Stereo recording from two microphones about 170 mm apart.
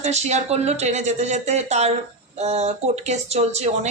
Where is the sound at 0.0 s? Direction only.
40° right (ahead or behind).